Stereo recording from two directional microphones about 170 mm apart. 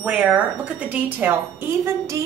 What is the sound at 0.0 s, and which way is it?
A woman's voice, 5° right (ahead or behind).